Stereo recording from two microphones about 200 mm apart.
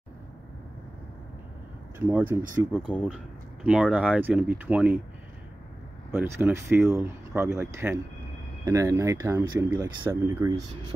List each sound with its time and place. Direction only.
2.0 s speech: 10° right (ahead or behind)
2.7 s speech: 5° left (ahead or behind)
6.1 s speech: 10° right (ahead or behind)